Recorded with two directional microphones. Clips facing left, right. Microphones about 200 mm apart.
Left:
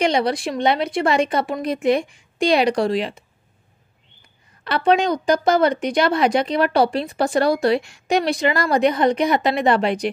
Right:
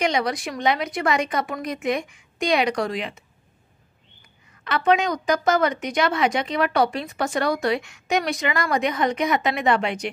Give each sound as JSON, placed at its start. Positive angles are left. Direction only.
{"t": 0.0, "sound": "speech", "side_deg": 30}
{"t": 4.6, "sound": "speech", "side_deg": 30}